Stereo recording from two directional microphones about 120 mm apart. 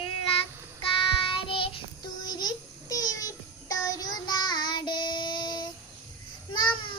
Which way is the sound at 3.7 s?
30° left (ahead or behind).